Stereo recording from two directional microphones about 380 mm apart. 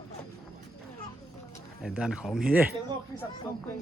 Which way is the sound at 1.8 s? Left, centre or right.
Centre.